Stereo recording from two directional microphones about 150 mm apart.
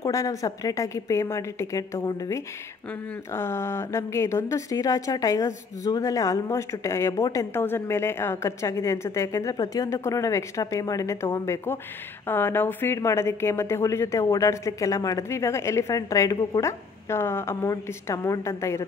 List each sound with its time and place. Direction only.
0.0 s a woman's voice: 20° left (ahead or behind)